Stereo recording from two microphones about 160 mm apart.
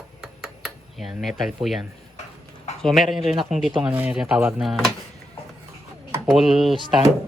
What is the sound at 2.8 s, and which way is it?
Speech, centre (ahead or behind).